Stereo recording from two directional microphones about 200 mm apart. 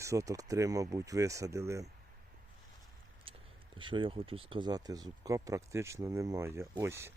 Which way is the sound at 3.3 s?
25° right (ahead or behind).